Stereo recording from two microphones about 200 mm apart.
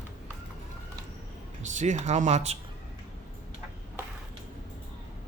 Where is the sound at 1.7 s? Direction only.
35° right (ahead or behind).